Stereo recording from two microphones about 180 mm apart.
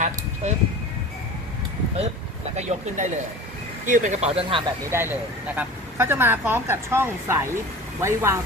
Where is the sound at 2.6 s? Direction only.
40° right (ahead or behind).